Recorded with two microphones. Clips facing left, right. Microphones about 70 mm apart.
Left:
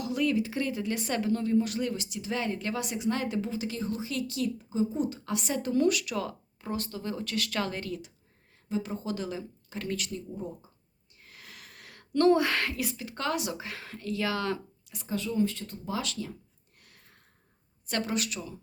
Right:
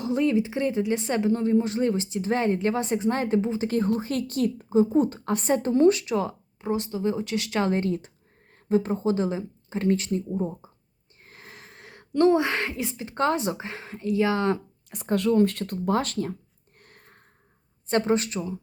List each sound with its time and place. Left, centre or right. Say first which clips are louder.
0.0 s speech: right 5 dB; right
3.7 s a woman's voice: right 9 dB; right
14.8 s speech: right 10 dB; right
16.8 s a sound: right 6 dB; right
17.8 s a woman's voice: right 8 dB; right